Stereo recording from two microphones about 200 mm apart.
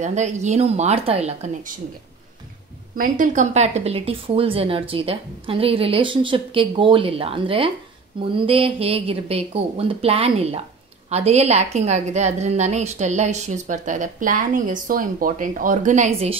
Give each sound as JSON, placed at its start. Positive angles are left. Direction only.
{"t": 0.0, "sound": "a woman's voice", "side_deg": -35}
{"t": 3.0, "sound": "a woman's voice", "side_deg": -40}